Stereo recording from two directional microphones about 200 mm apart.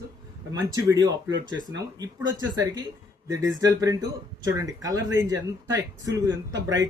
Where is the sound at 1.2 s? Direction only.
65° right (ahead or behind).